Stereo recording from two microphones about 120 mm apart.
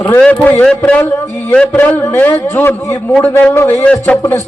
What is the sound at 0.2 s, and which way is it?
A man's voice, 10° left (ahead or behind).